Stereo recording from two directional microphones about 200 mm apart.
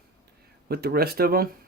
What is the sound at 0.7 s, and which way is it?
Speech, 50° right (ahead or behind).